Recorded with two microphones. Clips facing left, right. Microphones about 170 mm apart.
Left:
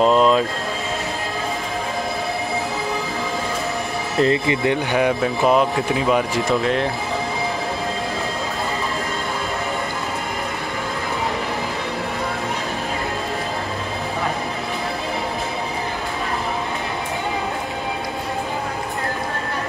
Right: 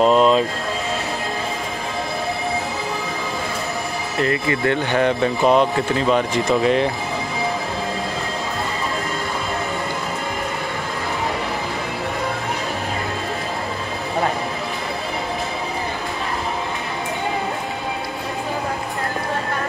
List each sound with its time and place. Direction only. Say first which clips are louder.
0.0 s speech: right 1 dB; 5° right (ahead or behind)
4.2 s speech: left 3 dB; 25° left (ahead or behind)
4.6 s speech: right 1 dB; 10° left (ahead or behind)